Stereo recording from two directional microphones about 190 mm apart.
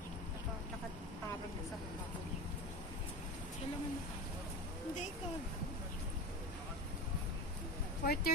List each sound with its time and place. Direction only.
8.0 s speech: 55° left (ahead or behind)